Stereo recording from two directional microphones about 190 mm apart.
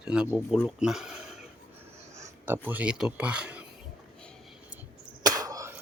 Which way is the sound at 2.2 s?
10° right (ahead or behind).